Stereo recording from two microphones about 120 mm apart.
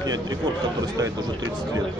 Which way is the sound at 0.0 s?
35° right (ahead or behind).